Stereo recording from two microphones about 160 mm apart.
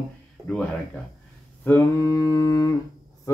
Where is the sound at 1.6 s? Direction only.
15° left (ahead or behind).